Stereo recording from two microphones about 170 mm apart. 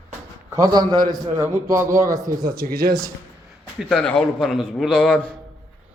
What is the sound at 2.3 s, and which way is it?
Speech, 60° right (ahead or behind).